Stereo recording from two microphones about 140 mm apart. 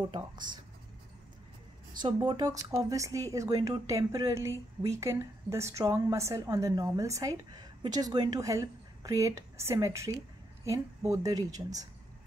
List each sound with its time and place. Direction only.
0.1 s speech: 35° right (ahead or behind)
2.2 s speech: 30° right (ahead or behind)